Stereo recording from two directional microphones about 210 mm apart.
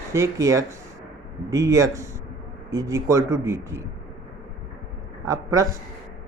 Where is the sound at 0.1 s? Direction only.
15° right (ahead or behind).